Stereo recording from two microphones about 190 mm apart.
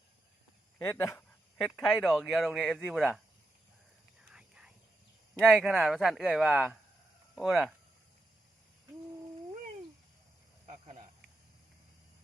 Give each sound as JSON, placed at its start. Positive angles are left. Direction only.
{"t": 0.8, "sound": "speech", "side_deg": 10}
{"t": 4.2, "sound": "whispering", "side_deg": -5}
{"t": 5.4, "sound": "speech", "side_deg": -5}
{"t": 10.7, "sound": "a sound", "side_deg": -35}